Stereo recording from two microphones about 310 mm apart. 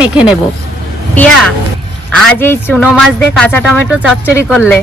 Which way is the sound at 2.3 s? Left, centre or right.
Centre.